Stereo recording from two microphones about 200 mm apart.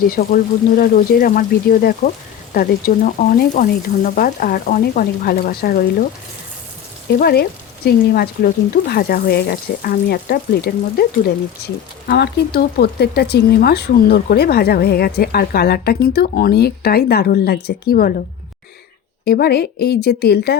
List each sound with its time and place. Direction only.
0.1 s speech: 45° left (ahead or behind)
7.2 s speech: 50° left (ahead or behind)
19.2 s speech: 55° left (ahead or behind)